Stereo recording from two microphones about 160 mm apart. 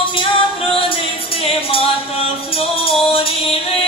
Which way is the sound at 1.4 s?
35° left (ahead or behind).